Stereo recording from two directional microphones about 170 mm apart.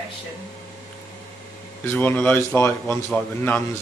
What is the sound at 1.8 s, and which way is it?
A man's voice, 10° left (ahead or behind).